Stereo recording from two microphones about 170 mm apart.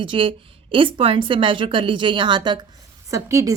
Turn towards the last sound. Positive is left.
turn(degrees=-20)  # may be behind; listen again after turning